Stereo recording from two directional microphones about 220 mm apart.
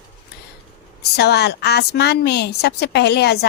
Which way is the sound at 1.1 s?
50° left (ahead or behind).